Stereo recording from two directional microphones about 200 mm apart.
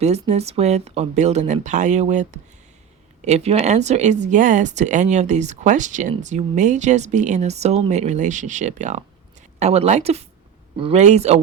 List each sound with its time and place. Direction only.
0.0 s speech: 35° right (ahead or behind)